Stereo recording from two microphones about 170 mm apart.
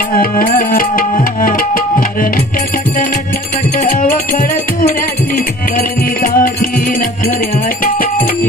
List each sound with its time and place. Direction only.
0.1 s music: 55° left (ahead or behind)
3.7 s music: 55° left (ahead or behind)